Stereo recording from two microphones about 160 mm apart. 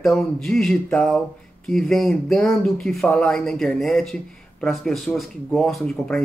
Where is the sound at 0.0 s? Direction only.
Centre (ahead or behind).